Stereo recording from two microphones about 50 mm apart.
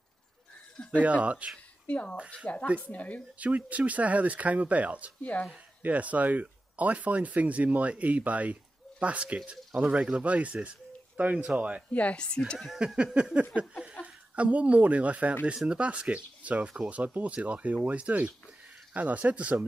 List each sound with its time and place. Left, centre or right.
1.0 s speech: right
1.9 s speech: left
3.3 s speech: right
5.2 s speech: left
5.8 s speech: right
11.9 s speech: left
12.7 s speech: right
15.5 s speech: centre
15.8 s speech: right